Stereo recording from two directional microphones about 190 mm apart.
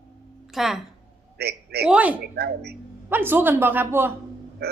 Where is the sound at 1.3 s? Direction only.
55° right (ahead or behind).